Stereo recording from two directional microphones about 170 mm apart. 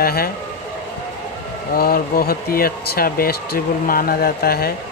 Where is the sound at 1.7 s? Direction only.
60° left (ahead or behind).